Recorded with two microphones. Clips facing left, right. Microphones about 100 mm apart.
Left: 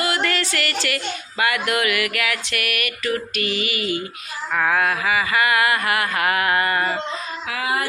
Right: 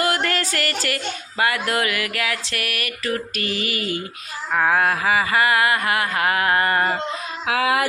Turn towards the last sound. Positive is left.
turn(degrees=-90)